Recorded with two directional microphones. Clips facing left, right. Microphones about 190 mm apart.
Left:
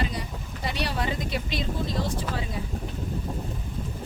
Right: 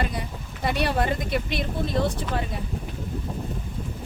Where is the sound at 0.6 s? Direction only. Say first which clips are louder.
Right 5 dB; 55° right (ahead or behind).